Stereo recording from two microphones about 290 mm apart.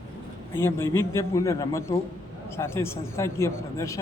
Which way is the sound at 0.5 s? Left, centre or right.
Centre.